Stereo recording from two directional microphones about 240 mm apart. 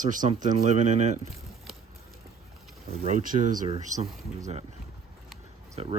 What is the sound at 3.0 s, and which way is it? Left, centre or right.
Speech, right.